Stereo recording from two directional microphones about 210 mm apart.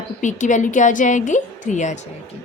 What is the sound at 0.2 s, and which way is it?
A woman's voice, 35° left (ahead or behind).